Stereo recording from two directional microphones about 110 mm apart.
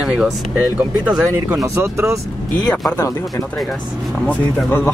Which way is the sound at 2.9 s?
25° left (ahead or behind).